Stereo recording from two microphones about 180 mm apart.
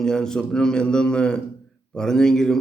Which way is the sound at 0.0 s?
5° left (ahead or behind).